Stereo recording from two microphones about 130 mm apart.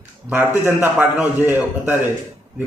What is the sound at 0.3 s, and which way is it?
A man's voice, 15° right (ahead or behind).